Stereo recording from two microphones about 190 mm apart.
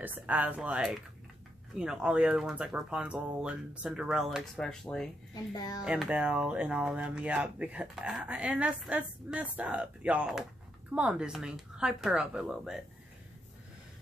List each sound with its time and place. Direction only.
0.0 s speech: 10° right (ahead or behind)
5.3 s a child's voice: 20° left (ahead or behind)
5.9 s speech: 5° right (ahead or behind)